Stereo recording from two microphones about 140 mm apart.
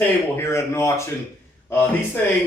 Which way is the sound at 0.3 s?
20° left (ahead or behind).